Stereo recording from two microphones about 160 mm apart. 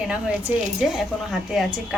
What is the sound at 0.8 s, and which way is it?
Speech, centre (ahead or behind).